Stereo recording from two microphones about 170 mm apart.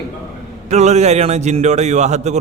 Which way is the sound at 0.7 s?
40° right (ahead or behind).